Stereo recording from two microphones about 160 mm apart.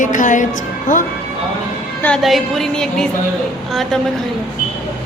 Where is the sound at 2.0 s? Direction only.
Centre (ahead or behind).